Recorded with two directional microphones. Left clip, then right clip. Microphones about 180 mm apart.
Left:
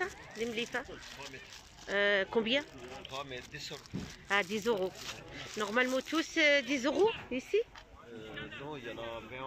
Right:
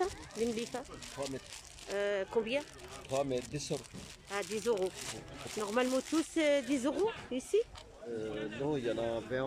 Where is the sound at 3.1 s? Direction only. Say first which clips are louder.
Right 10 dB; 55° right (ahead or behind).